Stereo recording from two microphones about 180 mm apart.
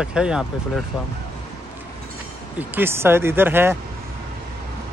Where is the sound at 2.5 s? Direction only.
10° right (ahead or behind).